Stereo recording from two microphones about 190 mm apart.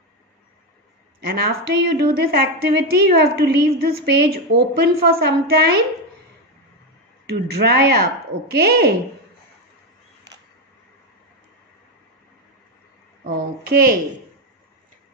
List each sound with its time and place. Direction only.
1.2 s a woman's voice: 55° right (ahead or behind)
7.2 s a woman's voice: 55° right (ahead or behind)
13.2 s child singing: 50° right (ahead or behind)